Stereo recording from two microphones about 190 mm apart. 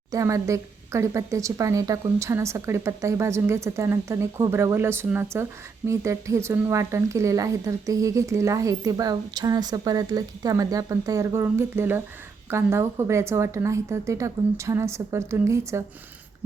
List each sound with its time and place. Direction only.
0.1 s a woman's voice: 15° right (ahead or behind)